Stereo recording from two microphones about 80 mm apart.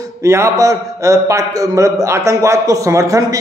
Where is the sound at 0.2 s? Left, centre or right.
Right.